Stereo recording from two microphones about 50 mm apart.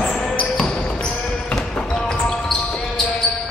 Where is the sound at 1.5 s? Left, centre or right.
Centre.